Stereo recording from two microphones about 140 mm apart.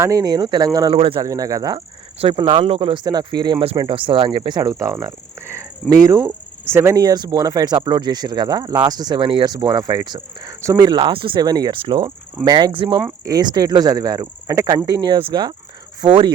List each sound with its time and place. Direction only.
0.0 s speech: 25° right (ahead or behind)
0.9 s speech: 40° right (ahead or behind)
1.2 s speech: 25° right (ahead or behind)
2.1 s speech: 40° right (ahead or behind)